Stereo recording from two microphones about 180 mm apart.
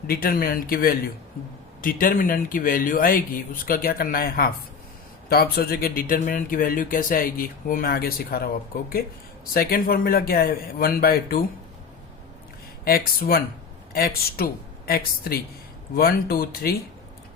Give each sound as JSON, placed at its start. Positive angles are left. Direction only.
{"t": 0.1, "sound": "speech", "side_deg": 55}
{"t": 9.5, "sound": "a man's voice", "side_deg": 55}
{"t": 12.8, "sound": "a man's voice", "side_deg": 55}